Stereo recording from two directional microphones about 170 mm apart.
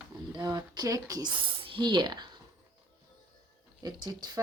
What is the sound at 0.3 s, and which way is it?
Speech, 25° right (ahead or behind).